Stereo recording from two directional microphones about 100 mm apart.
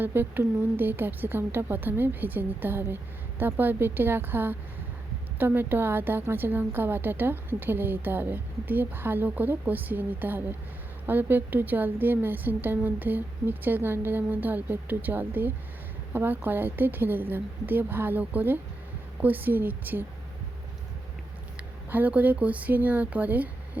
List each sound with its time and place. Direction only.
0.0 s a woman's voice: 20° right (ahead or behind)
21.8 s speech: 15° right (ahead or behind)